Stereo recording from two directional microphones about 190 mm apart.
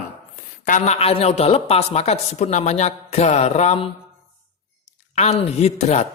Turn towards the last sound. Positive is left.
turn(degrees=35)  # may be behind; listen again after turning